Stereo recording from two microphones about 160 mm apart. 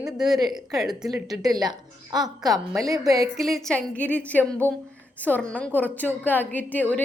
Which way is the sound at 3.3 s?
Centre (ahead or behind).